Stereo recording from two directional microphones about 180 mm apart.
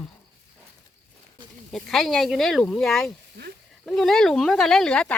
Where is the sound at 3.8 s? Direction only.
Centre (ahead or behind).